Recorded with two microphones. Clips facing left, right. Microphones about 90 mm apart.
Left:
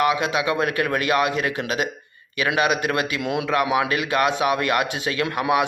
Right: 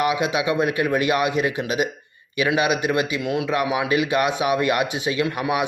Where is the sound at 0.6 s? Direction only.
55° left (ahead or behind).